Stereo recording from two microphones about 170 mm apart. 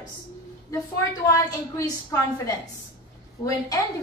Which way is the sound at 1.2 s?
20° left (ahead or behind).